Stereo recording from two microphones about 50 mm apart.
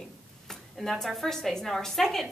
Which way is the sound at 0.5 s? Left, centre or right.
Centre.